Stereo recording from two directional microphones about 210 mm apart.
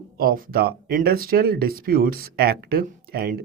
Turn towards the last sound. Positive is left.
turn(degrees=-45)  # may be behind; listen again after turning